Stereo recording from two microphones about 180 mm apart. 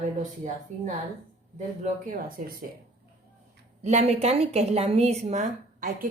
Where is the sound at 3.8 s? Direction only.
40° right (ahead or behind).